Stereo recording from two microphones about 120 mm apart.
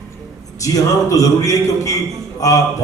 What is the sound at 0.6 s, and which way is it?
A man's voice, 25° left (ahead or behind).